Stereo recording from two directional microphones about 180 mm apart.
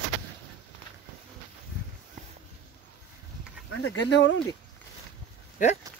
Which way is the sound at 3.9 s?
85° left.